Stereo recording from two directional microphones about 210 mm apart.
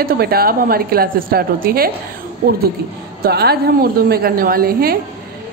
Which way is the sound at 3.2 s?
50° right (ahead or behind).